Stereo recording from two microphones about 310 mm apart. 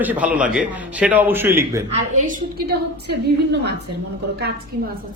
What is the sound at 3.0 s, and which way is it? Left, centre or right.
Speech, right.